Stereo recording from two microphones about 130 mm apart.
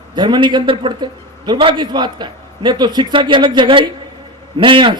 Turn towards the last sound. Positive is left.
turn(degrees=-40)  # may be behind; listen again after turning